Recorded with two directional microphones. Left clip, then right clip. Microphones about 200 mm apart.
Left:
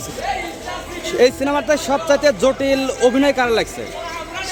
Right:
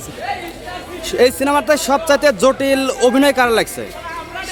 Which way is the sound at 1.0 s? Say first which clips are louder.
Right 1 dB; 25° right (ahead or behind).